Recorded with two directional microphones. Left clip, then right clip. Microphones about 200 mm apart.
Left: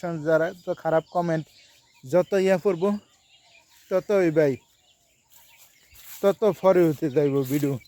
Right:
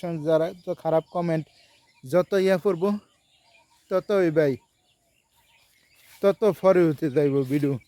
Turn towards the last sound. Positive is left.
turn(degrees=-20)  # may be behind; listen again after turning